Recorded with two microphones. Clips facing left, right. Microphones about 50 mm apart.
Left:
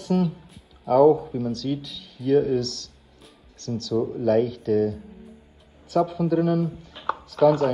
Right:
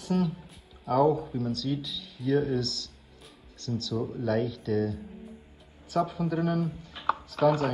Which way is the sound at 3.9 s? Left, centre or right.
Left.